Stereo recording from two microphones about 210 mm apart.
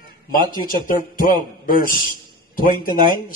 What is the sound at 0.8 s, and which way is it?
Speech, 40° left (ahead or behind).